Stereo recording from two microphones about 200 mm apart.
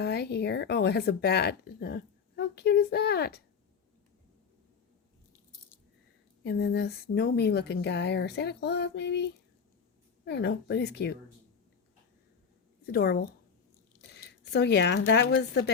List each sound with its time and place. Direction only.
0.0 s speech: 55° left (ahead or behind)
6.4 s speech: 55° left (ahead or behind)
12.8 s a woman's voice: 50° left (ahead or behind)
14.5 s speech: 60° left (ahead or behind)